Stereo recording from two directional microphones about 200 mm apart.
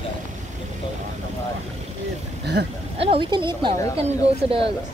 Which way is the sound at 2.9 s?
30° right (ahead or behind).